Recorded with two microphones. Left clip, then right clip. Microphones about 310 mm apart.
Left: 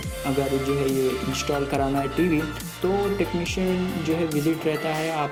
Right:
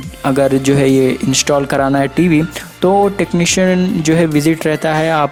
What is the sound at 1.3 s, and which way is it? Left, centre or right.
Speech, right.